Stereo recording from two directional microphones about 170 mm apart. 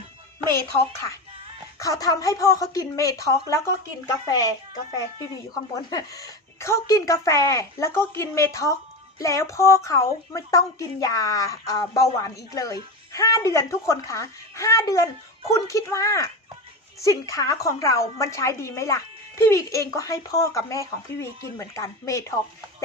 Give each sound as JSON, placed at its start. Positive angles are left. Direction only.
{"t": 1.8, "sound": "a woman's voice", "side_deg": 20}
{"t": 5.7, "sound": "a woman's voice", "side_deg": 20}